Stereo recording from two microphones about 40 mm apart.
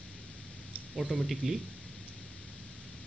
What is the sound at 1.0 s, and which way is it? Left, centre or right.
Speech, centre.